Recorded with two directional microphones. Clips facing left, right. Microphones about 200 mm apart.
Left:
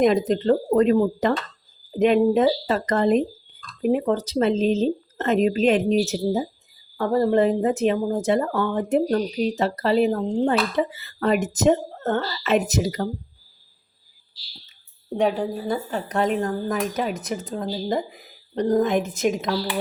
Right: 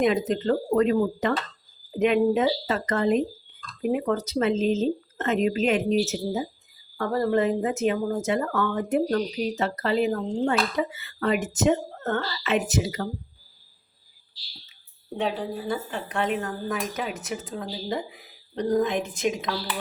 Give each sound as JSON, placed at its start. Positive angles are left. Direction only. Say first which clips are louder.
{"t": 0.0, "sound": "speech", "louder": "left 4 dB", "side_deg": 35}
{"t": 6.9, "sound": "speech", "louder": "left 4 dB", "side_deg": 25}
{"t": 15.6, "sound": "speech", "louder": "left 4 dB", "side_deg": 40}